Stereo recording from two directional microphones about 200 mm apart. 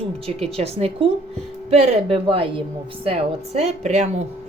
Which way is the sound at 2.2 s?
25° right (ahead or behind).